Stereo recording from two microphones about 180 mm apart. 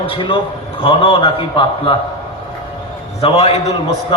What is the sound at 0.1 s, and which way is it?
A man's voice, 30° left (ahead or behind).